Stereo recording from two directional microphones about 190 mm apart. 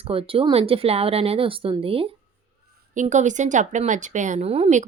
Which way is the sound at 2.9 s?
40° right (ahead or behind).